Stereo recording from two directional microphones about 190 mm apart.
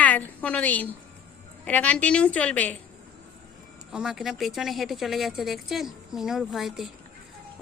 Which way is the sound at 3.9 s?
5° right (ahead or behind).